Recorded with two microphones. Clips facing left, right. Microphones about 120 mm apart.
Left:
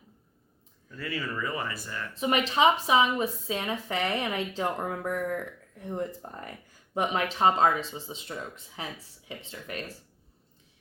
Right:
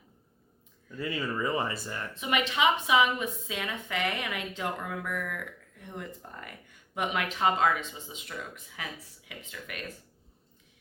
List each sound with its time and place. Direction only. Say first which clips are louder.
0.9 s speech: right 2 dB; 20° right (ahead or behind)
2.1 s a woman's voice: left 4 dB; 35° left (ahead or behind)